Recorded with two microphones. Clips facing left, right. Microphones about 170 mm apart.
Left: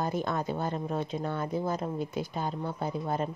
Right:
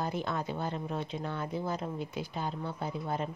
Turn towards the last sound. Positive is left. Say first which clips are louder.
# left 3 dB
turn(degrees=45)  # may be behind; listen again after turning